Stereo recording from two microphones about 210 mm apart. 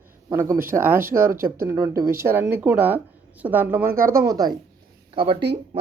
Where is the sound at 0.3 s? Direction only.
15° right (ahead or behind).